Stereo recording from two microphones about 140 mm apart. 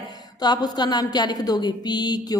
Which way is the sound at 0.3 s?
30° left (ahead or behind).